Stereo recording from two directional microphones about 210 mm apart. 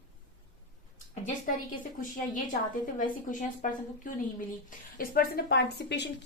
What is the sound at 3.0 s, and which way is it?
A woman's voice, 40° left (ahead or behind).